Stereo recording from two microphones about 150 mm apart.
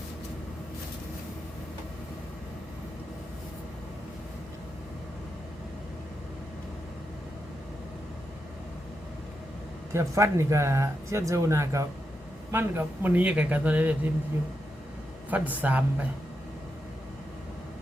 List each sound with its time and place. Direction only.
9.9 s speech: 15° right (ahead or behind)
15.3 s speech: 10° right (ahead or behind)